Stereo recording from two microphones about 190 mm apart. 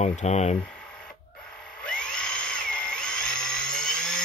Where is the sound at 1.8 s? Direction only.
5° left (ahead or behind).